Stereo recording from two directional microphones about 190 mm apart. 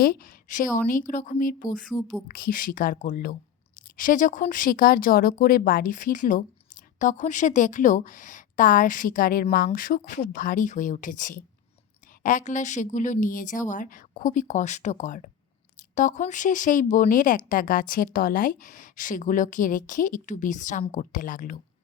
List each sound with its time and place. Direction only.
0.0 s a woman's voice: 50° left (ahead or behind)
1.8 s speech: centre (ahead or behind)
2.2 s a woman's voice: 50° left (ahead or behind)